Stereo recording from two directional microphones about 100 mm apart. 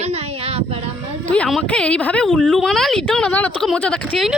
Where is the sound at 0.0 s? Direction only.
90° right.